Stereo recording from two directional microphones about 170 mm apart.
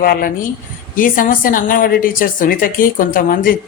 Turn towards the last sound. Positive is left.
turn(degrees=55)  # may be behind; listen again after turning